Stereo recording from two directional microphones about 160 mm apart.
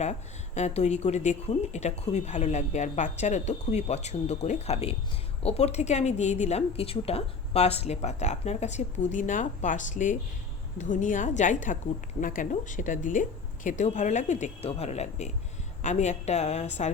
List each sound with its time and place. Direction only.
0.0 s speech: 45° left (ahead or behind)